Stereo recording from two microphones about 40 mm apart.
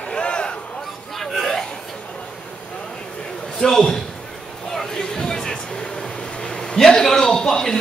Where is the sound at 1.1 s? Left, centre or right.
Centre.